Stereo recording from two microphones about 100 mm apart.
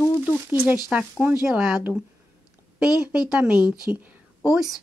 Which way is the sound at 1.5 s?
5° right (ahead or behind).